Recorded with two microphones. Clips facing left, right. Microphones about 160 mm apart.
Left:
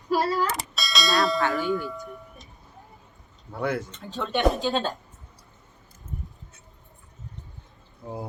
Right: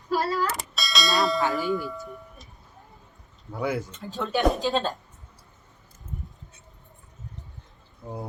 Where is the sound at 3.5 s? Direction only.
Centre (ahead or behind).